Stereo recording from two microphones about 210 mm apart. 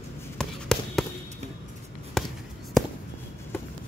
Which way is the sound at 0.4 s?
5° left (ahead or behind).